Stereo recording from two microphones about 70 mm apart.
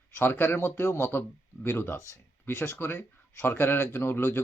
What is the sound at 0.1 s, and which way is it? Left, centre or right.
Speech, left.